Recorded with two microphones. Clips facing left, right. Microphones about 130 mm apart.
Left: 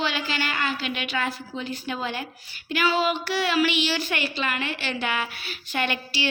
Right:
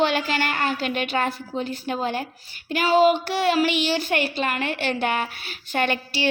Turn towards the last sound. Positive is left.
turn(degrees=-45)  # may be behind; listen again after turning